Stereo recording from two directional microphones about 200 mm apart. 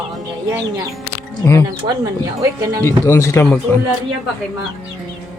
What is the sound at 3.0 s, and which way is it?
Speech, 15° left (ahead or behind).